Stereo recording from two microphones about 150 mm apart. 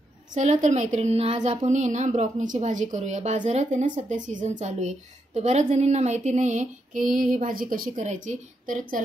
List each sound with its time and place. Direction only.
0.3 s a woman's voice: 50° right (ahead or behind)